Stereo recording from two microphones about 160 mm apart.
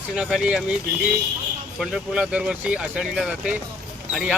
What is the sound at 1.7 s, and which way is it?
Speech, centre (ahead or behind).